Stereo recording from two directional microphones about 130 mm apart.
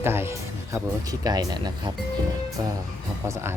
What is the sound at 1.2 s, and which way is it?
Speech, 30° right (ahead or behind).